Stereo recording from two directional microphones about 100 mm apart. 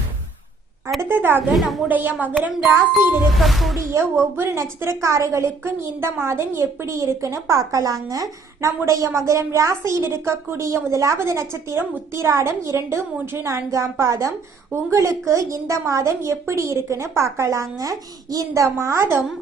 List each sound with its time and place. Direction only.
1.0 s a woman's voice: 20° right (ahead or behind)
3.3 s speech: centre (ahead or behind)
3.9 s a woman's voice: 25° right (ahead or behind)